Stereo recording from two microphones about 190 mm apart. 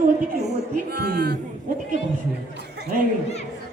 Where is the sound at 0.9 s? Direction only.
60° right (ahead or behind).